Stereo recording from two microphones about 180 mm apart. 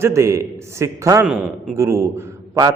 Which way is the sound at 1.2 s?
5° right (ahead or behind).